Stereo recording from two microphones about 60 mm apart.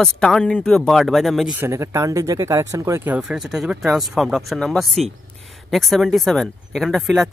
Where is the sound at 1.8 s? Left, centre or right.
Right.